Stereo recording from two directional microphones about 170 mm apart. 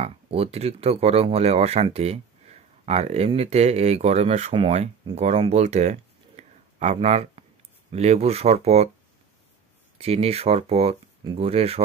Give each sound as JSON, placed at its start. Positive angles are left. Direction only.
{"t": 0.0, "sound": "speech", "side_deg": -35}
{"t": 9.9, "sound": "speech", "side_deg": -35}